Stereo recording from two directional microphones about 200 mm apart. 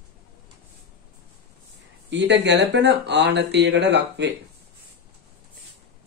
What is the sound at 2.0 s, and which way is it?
Speech, 60° right (ahead or behind).